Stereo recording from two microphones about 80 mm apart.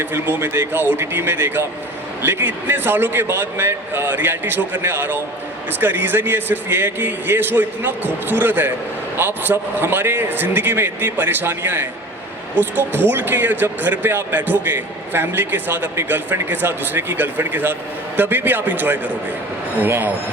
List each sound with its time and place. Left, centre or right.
0.0 s speech: right